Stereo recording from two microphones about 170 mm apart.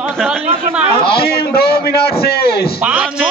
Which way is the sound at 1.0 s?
65° left (ahead or behind).